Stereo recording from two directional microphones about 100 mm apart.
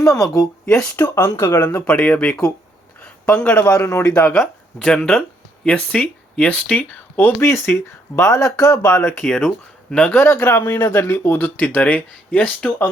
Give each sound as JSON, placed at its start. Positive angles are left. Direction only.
{"t": 0.6, "sound": "speech", "side_deg": 10}
{"t": 1.0, "sound": "speech", "side_deg": 25}
{"t": 3.0, "sound": "a sound", "side_deg": 10}
{"t": 3.7, "sound": "a man's voice", "side_deg": 30}
{"t": 4.8, "sound": "speech", "side_deg": 5}
{"t": 8.8, "sound": "speech", "side_deg": 10}
{"t": 10.2, "sound": "speech", "side_deg": 25}